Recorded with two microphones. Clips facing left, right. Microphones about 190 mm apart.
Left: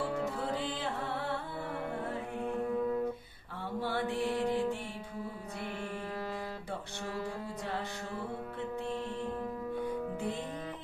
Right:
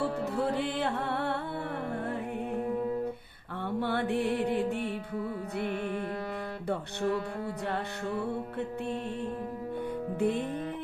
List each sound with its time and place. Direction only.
0.4 s music: 60° right (ahead or behind)
3.8 s mantra: 60° right (ahead or behind)
5.5 s music: 60° right (ahead or behind)
10.2 s music: 60° right (ahead or behind)